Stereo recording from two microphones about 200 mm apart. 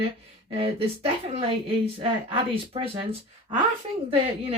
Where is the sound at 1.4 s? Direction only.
30° right (ahead or behind).